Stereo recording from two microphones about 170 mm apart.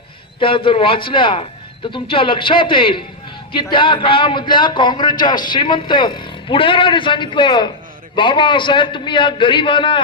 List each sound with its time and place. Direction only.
0.3 s a man's voice: 30° left (ahead or behind)